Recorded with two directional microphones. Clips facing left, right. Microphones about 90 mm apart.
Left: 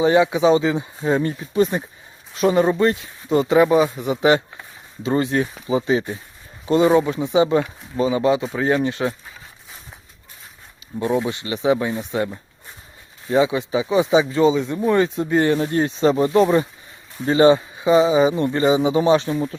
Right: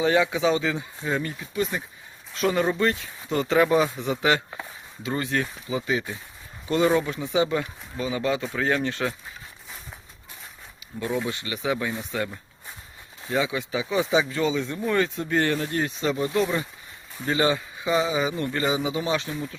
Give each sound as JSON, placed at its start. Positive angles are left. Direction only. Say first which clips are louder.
{"t": 0.0, "sound": "speech", "louder": "left 6 dB", "side_deg": 20}
{"t": 2.3, "sound": "speech", "louder": "left 6 dB", "side_deg": 20}
{"t": 11.3, "sound": "speech", "louder": "left 8 dB", "side_deg": 25}
{"t": 15.6, "sound": "speech", "louder": "left 8 dB", "side_deg": 30}